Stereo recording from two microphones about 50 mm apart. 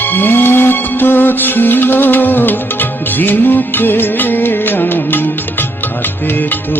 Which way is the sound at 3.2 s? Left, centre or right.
Left.